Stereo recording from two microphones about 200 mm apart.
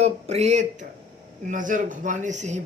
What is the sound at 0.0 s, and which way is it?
Speech, 30° right (ahead or behind).